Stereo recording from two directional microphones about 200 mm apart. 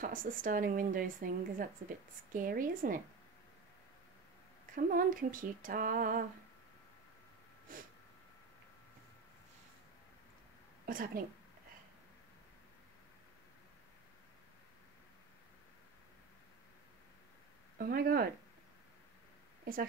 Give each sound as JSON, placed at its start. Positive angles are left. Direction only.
{"t": 0.0, "sound": "a woman's voice", "side_deg": -45}
{"t": 4.7, "sound": "a woman's voice", "side_deg": -40}
{"t": 7.7, "sound": "a woman's voice", "side_deg": -45}
{"t": 10.9, "sound": "a woman's voice", "side_deg": -45}
{"t": 17.7, "sound": "a woman's voice", "side_deg": -45}
{"t": 19.6, "sound": "a woman's voice", "side_deg": -45}